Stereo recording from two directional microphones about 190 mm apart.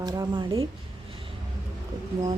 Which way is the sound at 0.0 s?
20° right (ahead or behind).